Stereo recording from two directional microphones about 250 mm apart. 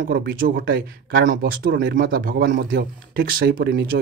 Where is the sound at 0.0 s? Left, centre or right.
Right.